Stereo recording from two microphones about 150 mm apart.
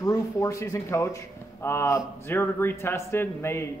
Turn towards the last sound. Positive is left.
turn(degrees=15)  # may be behind; listen again after turning